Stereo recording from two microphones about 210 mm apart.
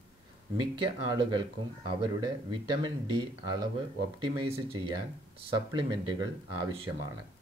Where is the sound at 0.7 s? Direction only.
20° right (ahead or behind).